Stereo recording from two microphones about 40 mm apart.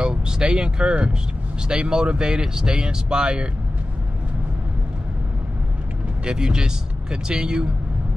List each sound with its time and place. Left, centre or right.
0.0 s speech: right
6.2 s speech: centre